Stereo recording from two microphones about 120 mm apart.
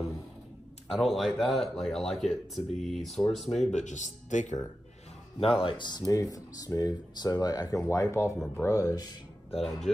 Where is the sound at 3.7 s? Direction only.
85° left.